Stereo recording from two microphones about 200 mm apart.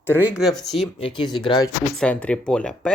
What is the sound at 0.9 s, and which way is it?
Speech, 25° left (ahead or behind).